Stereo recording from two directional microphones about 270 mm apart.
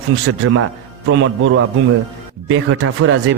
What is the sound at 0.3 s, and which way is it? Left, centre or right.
Speech, right.